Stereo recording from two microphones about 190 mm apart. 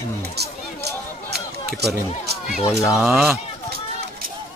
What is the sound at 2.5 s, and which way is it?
Speech, 5° right (ahead or behind).